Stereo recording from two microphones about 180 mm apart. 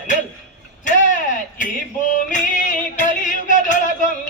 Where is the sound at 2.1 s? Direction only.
45° left (ahead or behind).